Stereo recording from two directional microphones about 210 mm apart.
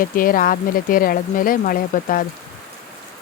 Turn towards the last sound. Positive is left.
turn(degrees=40)  # may be behind; listen again after turning